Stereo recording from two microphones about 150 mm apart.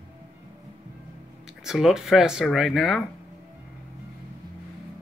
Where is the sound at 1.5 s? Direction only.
5° right (ahead or behind).